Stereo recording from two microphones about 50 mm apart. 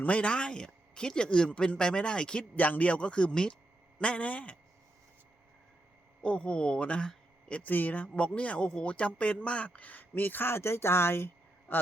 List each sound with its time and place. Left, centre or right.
0.0 s a man's voice: left
2.6 s a man's voice: left
6.2 s speech: left
7.4 s a sound: left
7.7 s speech: left
11.7 s speech: left